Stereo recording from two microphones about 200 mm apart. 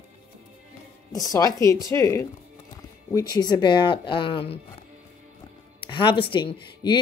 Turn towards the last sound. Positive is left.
turn(degrees=20)  # may be behind; listen again after turning